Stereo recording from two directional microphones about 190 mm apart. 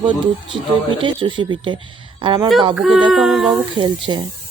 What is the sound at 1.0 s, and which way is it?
Speech, 25° right (ahead or behind).